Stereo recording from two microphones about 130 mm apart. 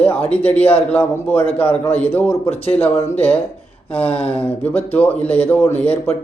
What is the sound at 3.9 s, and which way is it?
A man's voice, 10° left (ahead or behind).